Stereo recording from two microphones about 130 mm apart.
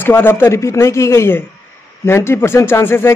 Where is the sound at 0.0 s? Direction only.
15° left (ahead or behind).